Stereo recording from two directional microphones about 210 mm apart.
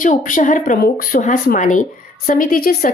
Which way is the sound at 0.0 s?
40° left (ahead or behind).